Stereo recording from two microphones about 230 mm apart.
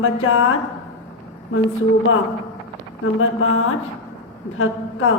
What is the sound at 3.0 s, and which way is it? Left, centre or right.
Mantra, left.